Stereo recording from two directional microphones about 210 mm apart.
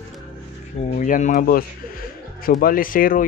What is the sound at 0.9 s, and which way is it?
Speech, 40° left (ahead or behind).